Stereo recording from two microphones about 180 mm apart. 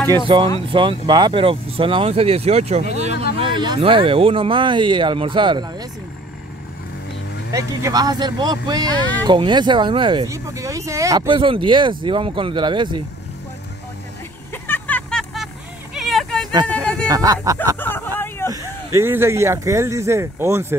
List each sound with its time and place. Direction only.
0.7 s speech: 25° right (ahead or behind)
3.3 s speech: 25° right (ahead or behind)
7.5 s speech: 20° right (ahead or behind)
14.5 s vehicle: 10° left (ahead or behind)
16.6 s a sound: 5° left (ahead or behind)
17.1 s speech: 20° right (ahead or behind)
17.7 s a sound: 10° left (ahead or behind)
18.5 s speech: 15° right (ahead or behind)